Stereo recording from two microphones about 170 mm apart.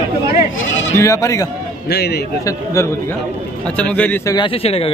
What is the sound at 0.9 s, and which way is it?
Speech, 20° left (ahead or behind).